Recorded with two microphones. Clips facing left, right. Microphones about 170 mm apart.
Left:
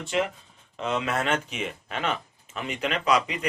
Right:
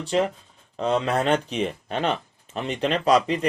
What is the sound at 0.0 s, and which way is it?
Speech, 35° right (ahead or behind).